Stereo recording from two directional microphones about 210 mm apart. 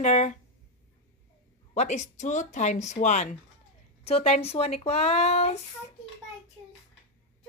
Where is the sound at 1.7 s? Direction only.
35° left (ahead or behind).